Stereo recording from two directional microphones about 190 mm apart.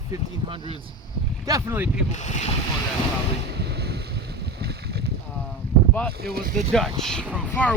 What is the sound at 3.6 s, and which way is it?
Boat, 60° right (ahead or behind).